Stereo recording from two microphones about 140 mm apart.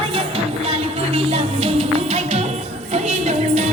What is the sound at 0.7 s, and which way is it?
Music, 45° right (ahead or behind).